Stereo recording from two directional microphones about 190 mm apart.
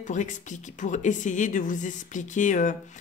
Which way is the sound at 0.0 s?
40° left (ahead or behind).